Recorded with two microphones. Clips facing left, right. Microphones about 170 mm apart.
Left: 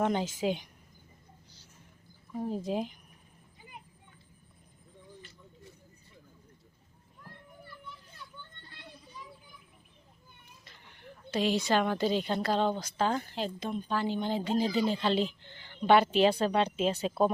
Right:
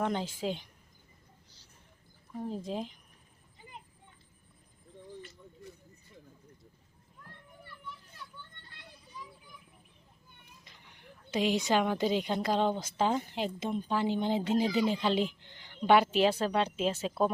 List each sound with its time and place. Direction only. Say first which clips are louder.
0.0 s a woman's voice: left 3 dB; 5° left (ahead or behind)
2.6 s speech: left 4 dB; 5° left (ahead or behind)
10.6 s a woman's voice: left 3 dB; 15° right (ahead or behind)